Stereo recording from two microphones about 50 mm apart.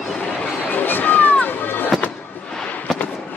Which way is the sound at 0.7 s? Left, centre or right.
Left.